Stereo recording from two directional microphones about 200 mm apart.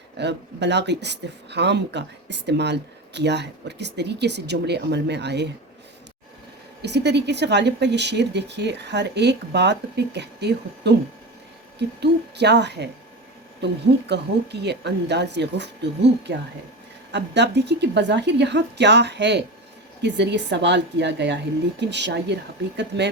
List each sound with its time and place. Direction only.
0.2 s speech: 60° right (ahead or behind)
6.8 s speech: 55° right (ahead or behind)